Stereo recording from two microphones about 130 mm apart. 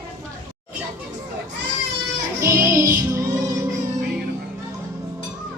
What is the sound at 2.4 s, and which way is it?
Music, 25° right (ahead or behind).